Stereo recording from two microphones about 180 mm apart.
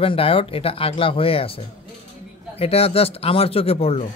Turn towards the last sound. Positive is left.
turn(degrees=35)  # may be behind; listen again after turning